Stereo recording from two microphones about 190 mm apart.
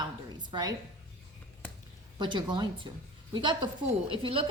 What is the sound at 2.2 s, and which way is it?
A woman's voice, 25° right (ahead or behind).